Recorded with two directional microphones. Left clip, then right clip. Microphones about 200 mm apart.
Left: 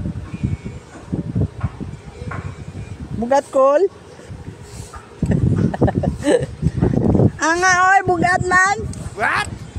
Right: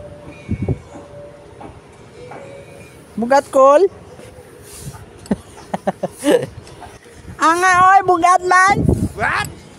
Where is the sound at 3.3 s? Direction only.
15° right (ahead or behind).